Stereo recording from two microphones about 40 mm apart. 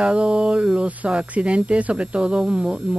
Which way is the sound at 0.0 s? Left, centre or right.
Right.